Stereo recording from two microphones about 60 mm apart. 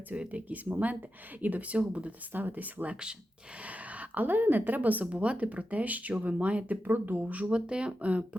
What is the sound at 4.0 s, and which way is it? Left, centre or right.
Speech, right.